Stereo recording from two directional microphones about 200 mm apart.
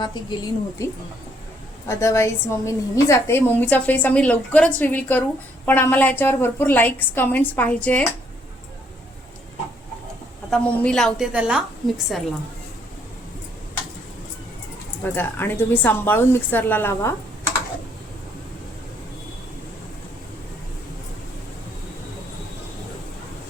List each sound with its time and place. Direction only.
0.0 s a woman's voice: 20° left (ahead or behind)
1.9 s a woman's voice: 15° left (ahead or behind)
10.5 s a woman's voice: 5° left (ahead or behind)
15.0 s a woman's voice: 10° left (ahead or behind)